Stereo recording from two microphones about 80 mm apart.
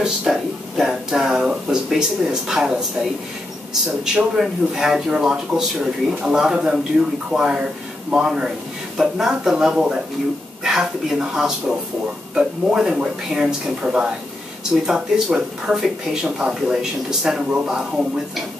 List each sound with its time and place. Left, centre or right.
0.0 s speech: centre
4.0 s speech: centre